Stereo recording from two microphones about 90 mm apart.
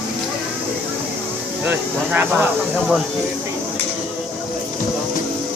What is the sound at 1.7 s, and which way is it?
Speech, 20° right (ahead or behind).